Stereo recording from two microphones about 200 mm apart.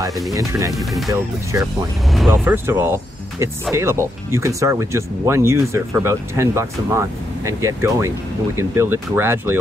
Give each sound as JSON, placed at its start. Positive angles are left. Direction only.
{"t": 0.3, "sound": "speech", "side_deg": -15}
{"t": 0.7, "sound": "speech", "side_deg": 0}
{"t": 1.1, "sound": "speech", "side_deg": -15}